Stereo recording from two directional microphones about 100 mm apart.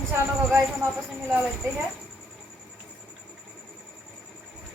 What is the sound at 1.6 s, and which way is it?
Speech, 30° right (ahead or behind).